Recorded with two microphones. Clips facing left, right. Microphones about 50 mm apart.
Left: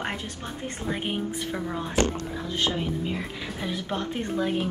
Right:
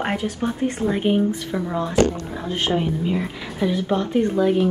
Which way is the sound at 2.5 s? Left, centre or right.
Right.